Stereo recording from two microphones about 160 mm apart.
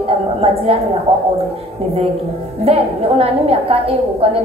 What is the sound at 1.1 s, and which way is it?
Speech, 35° right (ahead or behind).